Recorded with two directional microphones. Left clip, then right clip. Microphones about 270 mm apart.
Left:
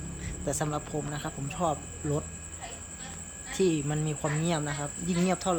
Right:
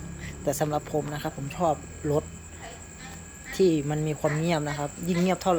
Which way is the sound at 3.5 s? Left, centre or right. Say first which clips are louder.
Right 4 dB; centre.